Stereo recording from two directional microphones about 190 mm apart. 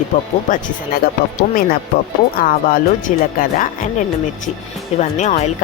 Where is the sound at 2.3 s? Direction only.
50° left (ahead or behind).